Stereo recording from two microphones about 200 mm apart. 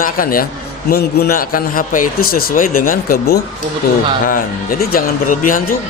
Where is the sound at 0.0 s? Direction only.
45° left (ahead or behind).